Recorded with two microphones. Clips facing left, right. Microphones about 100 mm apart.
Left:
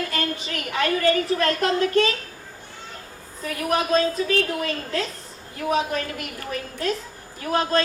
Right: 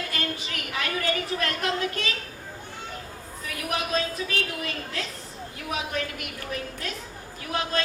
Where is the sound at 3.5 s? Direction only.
40° left (ahead or behind).